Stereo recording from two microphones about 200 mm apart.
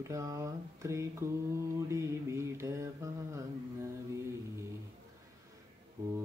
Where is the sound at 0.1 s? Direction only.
15° right (ahead or behind).